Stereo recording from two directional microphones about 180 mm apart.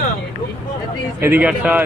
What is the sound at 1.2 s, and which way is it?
Speech, 10° right (ahead or behind).